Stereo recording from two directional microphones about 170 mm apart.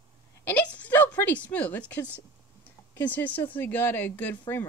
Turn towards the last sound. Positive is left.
turn(degrees=10)  # may be behind; listen again after turning